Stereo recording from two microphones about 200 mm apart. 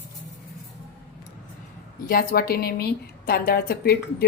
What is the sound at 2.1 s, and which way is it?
A woman's voice, 45° left (ahead or behind).